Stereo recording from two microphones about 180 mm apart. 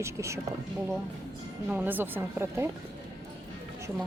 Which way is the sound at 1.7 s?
10° right (ahead or behind).